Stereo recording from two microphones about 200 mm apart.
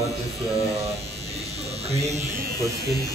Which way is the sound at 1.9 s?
35° right (ahead or behind).